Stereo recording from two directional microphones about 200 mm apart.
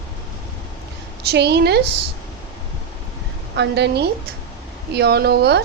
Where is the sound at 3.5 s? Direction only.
60° right (ahead or behind).